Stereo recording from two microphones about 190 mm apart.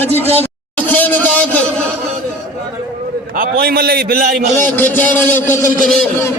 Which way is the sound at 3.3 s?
50° right (ahead or behind).